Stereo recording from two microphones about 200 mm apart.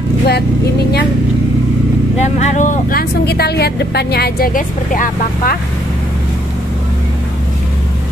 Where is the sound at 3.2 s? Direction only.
55° left (ahead or behind).